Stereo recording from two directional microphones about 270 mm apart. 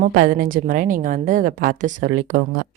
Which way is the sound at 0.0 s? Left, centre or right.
Right.